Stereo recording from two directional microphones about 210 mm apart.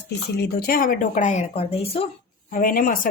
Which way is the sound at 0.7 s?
40° left (ahead or behind).